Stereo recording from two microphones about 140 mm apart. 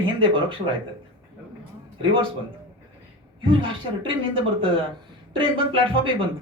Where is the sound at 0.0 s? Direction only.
35° right (ahead or behind).